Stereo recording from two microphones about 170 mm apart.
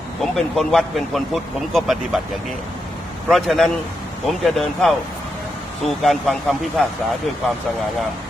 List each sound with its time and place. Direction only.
0.2 s speech: centre (ahead or behind)
3.2 s speech: centre (ahead or behind)
6.0 s speech: centre (ahead or behind)